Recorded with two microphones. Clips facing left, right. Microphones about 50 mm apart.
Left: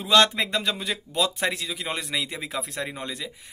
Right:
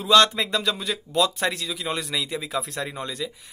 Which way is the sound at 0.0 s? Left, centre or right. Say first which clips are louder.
Right 2 dB; left.